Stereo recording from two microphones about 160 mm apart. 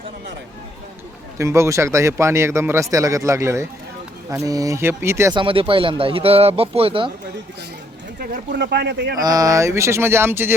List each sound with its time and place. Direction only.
1.4 s speech: 20° right (ahead or behind)
5.4 s speech: 35° right (ahead or behind)
8.2 s speech: 90° right
9.2 s speech: 20° right (ahead or behind)